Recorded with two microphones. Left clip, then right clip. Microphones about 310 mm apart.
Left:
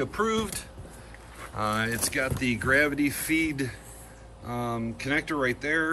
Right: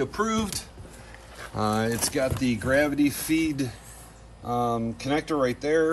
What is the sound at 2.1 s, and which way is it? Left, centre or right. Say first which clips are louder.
Speech: right 2 dB; centre.